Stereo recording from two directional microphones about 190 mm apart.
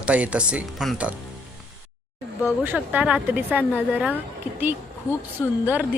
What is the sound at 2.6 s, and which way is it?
Speech, 10° right (ahead or behind).